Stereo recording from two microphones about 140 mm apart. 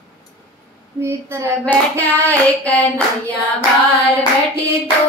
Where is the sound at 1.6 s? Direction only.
10° left (ahead or behind).